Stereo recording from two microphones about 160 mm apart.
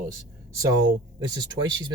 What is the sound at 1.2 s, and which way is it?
Speech, 25° right (ahead or behind).